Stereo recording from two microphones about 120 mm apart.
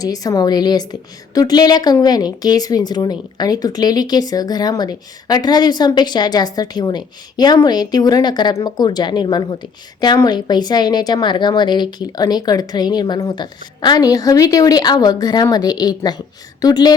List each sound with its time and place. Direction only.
0.0 s a woman's voice: 30° left (ahead or behind)